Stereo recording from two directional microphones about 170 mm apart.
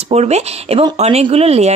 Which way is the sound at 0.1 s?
40° right (ahead or behind).